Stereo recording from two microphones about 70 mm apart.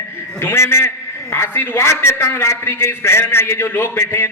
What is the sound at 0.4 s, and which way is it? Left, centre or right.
A man's voice, left.